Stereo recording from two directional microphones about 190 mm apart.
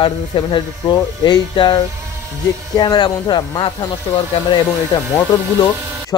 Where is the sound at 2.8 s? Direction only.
20° left (ahead or behind).